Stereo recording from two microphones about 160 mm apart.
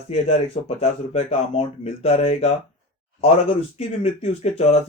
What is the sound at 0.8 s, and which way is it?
Speech, 40° left (ahead or behind).